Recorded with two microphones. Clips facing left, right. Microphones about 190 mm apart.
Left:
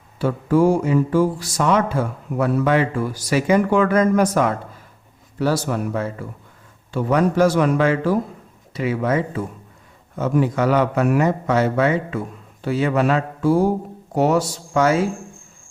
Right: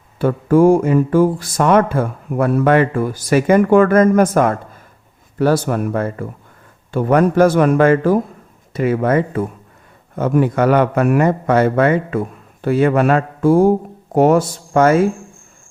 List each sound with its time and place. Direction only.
0.2 s a man's voice: 55° right (ahead or behind)